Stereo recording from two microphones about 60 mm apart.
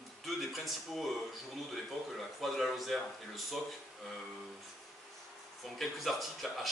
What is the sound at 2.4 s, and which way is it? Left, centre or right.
Speech, centre.